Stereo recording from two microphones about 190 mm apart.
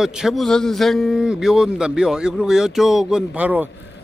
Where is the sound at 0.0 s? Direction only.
5° right (ahead or behind).